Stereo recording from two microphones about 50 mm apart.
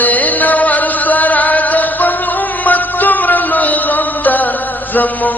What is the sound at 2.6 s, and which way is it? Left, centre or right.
Music, left.